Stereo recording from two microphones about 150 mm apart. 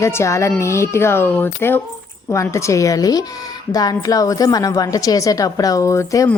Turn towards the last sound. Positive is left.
turn(degrees=20)  # may be behind; listen again after turning